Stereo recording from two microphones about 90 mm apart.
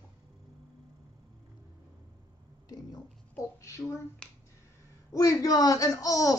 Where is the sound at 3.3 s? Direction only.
35° left (ahead or behind).